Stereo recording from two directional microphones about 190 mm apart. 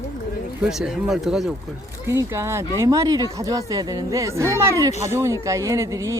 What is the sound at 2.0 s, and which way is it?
Speech, 15° right (ahead or behind).